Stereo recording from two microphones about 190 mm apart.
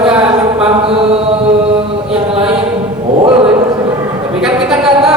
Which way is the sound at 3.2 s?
30° right (ahead or behind).